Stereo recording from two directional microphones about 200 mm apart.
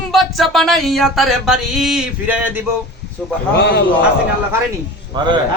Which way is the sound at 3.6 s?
60° left (ahead or behind).